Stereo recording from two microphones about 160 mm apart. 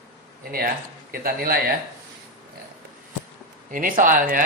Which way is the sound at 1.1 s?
65° right (ahead or behind).